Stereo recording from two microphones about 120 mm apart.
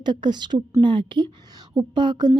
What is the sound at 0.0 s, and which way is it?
Speech, 40° right (ahead or behind).